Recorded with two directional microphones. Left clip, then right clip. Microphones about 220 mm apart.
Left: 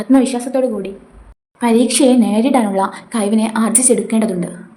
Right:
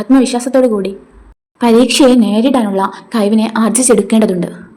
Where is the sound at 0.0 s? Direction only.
15° right (ahead or behind).